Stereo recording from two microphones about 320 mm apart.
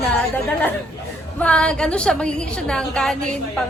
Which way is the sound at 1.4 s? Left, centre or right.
Centre.